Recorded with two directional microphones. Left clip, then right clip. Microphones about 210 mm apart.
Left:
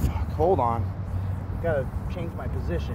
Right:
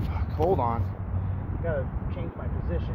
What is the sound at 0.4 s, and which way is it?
Speech, 15° left (ahead or behind).